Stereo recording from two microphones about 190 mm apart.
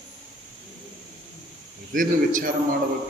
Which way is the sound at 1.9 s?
45° right (ahead or behind).